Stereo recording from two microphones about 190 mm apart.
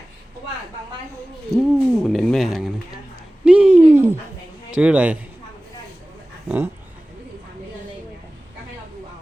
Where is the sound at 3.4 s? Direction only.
5° right (ahead or behind).